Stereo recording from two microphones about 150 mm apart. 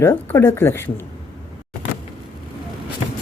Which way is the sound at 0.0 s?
15° left (ahead or behind).